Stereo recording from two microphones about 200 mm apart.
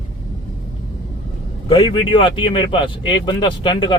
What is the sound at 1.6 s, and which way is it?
Speech, 25° left (ahead or behind).